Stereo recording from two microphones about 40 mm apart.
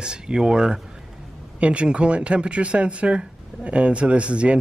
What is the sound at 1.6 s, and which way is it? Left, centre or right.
Speech, right.